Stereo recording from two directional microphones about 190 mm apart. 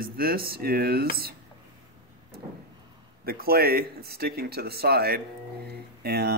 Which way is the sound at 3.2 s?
55° right (ahead or behind).